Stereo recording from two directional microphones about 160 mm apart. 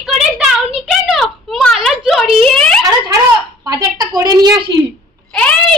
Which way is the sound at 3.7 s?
25° right (ahead or behind).